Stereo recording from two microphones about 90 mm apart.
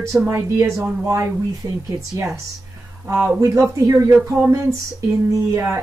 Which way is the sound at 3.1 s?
30° right (ahead or behind).